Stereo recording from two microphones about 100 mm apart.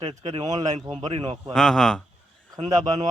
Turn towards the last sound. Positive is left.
turn(degrees=-40)  # may be behind; listen again after turning